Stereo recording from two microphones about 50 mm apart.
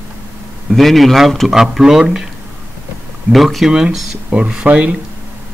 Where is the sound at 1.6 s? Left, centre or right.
Centre.